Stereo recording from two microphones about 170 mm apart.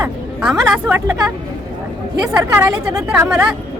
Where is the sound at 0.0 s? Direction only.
5° right (ahead or behind).